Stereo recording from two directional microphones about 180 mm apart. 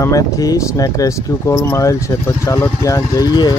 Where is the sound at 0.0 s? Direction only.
20° left (ahead or behind).